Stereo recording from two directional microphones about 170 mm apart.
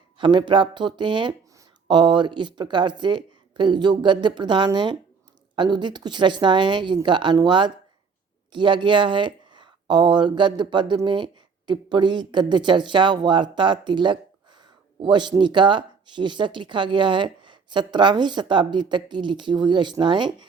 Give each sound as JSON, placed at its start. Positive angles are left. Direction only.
{"t": 0.2, "sound": "speech", "side_deg": -30}